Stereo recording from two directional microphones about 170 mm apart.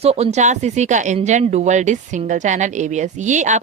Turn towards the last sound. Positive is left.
turn(degrees=-45)  # may be behind; listen again after turning